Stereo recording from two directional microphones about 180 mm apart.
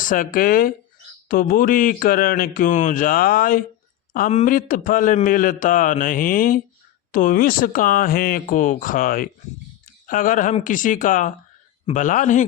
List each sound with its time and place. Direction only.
0.0 s speech: 50° left (ahead or behind)